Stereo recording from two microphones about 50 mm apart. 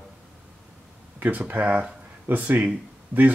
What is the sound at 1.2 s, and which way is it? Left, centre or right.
Speech, right.